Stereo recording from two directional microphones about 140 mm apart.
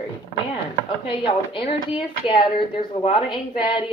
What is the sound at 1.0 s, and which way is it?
Speech, 40° left (ahead or behind).